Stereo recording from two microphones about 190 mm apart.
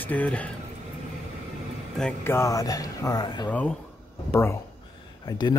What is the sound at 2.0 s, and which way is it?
Speech, 10° left (ahead or behind).